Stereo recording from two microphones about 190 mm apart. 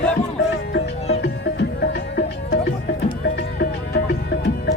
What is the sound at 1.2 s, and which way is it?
Music, 60° left (ahead or behind).